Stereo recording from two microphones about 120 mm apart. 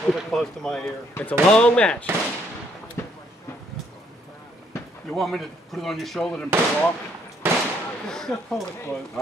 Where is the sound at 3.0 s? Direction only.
20° left (ahead or behind).